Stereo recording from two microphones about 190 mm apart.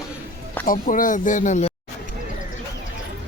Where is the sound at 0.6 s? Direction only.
45° left (ahead or behind).